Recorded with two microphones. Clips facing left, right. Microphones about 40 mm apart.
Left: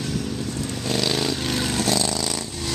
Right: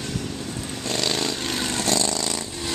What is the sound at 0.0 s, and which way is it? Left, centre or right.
Vehicle, centre.